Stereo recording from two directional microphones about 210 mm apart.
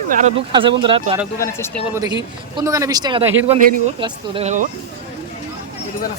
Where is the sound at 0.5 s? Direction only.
25° right (ahead or behind).